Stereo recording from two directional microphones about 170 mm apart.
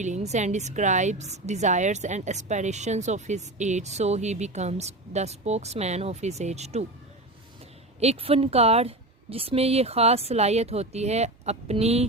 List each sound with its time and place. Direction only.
0.0 s a woman's voice: 40° right (ahead or behind)
7.9 s a woman's voice: 35° right (ahead or behind)